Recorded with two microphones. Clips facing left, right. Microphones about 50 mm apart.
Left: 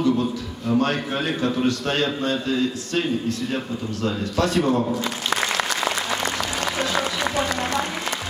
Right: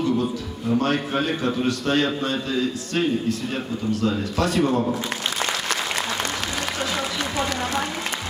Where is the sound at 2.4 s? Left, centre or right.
Left.